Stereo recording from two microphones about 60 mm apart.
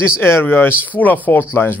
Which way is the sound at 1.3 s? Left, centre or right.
Left.